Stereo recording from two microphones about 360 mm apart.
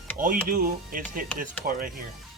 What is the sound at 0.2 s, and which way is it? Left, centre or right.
Speech, right.